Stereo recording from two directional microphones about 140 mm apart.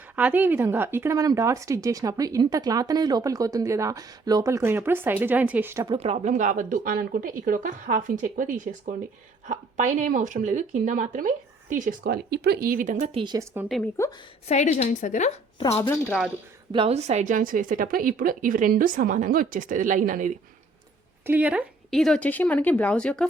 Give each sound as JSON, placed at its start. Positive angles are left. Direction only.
{"t": 0.2, "sound": "speech", "side_deg": -10}
{"t": 6.0, "sound": "a woman's voice", "side_deg": -55}
{"t": 12.5, "sound": "a woman's voice", "side_deg": -85}
{"t": 13.1, "sound": "speech", "side_deg": -30}
{"t": 13.7, "sound": "a woman's voice", "side_deg": 0}
{"t": 14.4, "sound": "a woman's voice", "side_deg": 55}
{"t": 14.8, "sound": "a woman's voice", "side_deg": 65}
{"t": 16.7, "sound": "a woman's voice", "side_deg": -45}
{"t": 21.2, "sound": "a woman's voice", "side_deg": -10}
{"t": 21.8, "sound": "speech", "side_deg": 5}